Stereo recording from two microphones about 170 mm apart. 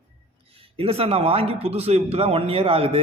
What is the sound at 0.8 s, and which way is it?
Speech, 35° right (ahead or behind).